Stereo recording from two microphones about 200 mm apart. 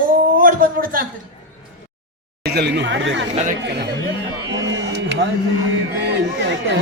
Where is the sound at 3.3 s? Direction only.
35° right (ahead or behind).